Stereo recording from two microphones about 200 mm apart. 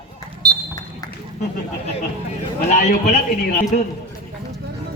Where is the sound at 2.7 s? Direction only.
35° left (ahead or behind).